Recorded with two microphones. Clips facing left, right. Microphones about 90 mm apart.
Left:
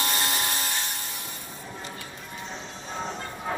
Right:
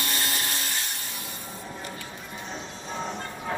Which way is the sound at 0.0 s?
20° left (ahead or behind).